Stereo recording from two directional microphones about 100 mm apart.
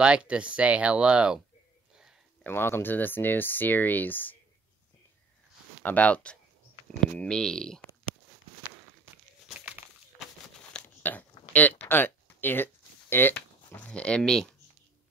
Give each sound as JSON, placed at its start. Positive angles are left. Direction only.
{"t": 0.0, "sound": "speech", "side_deg": -10}
{"t": 2.4, "sound": "speech", "side_deg": 20}
{"t": 5.8, "sound": "speech", "side_deg": 15}
{"t": 11.0, "sound": "a sound", "side_deg": 15}
{"t": 13.1, "sound": "speech", "side_deg": 20}